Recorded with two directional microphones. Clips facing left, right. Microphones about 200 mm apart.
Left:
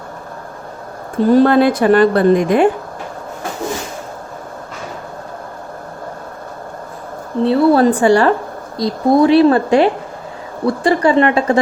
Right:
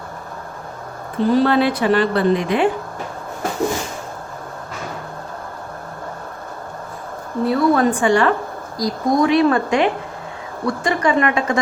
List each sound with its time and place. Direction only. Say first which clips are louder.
1.2 s a woman's voice: left 5 dB; 45° left (ahead or behind)
7.4 s speech: left 5 dB; 30° left (ahead or behind)